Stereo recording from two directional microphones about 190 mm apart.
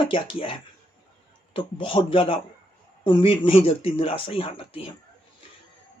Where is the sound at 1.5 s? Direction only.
30° left (ahead or behind).